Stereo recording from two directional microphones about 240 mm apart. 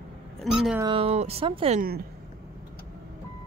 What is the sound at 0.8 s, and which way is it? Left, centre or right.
Speech, right.